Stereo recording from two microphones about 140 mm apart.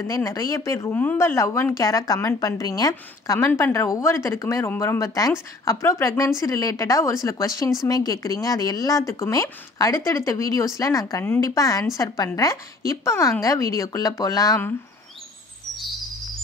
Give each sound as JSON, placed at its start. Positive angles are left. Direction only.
{"t": 0.0, "sound": "a woman's voice", "side_deg": 25}
{"t": 13.0, "sound": "a woman's voice", "side_deg": 20}